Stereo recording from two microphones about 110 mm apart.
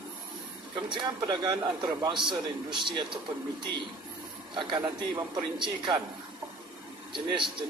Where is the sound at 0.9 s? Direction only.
45° right (ahead or behind).